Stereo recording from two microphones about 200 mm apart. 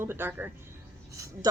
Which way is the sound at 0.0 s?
10° right (ahead or behind).